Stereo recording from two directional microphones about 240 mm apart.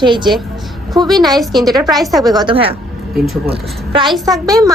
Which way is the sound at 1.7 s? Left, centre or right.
Centre.